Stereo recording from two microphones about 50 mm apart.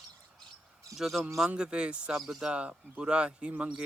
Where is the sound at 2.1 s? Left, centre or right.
Centre.